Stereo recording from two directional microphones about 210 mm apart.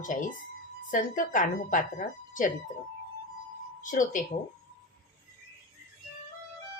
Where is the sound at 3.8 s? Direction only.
40° left (ahead or behind).